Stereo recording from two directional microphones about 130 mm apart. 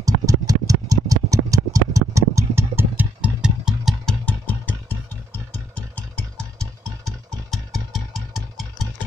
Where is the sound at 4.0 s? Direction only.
10° left (ahead or behind).